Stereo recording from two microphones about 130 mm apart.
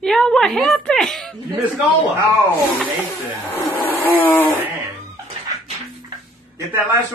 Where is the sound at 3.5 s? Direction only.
15° left (ahead or behind).